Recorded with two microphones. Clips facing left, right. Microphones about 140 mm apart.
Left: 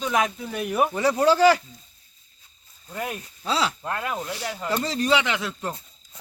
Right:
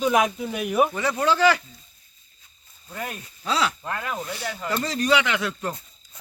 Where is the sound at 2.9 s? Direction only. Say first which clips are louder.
Left 2 dB; 5° left (ahead or behind).